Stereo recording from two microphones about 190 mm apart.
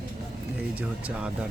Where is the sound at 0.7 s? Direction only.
5° right (ahead or behind).